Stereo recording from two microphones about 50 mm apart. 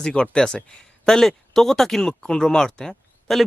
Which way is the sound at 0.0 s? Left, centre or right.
Centre.